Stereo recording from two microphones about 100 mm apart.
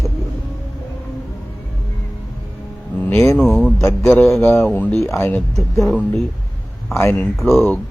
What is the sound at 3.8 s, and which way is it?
Speech, 30° left (ahead or behind).